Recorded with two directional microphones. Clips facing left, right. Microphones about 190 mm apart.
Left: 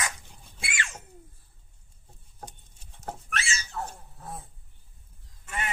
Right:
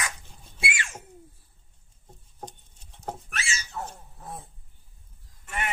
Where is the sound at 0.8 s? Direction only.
10° right (ahead or behind).